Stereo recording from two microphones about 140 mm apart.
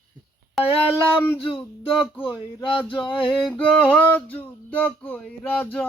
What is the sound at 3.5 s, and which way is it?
Speech, 10° left (ahead or behind).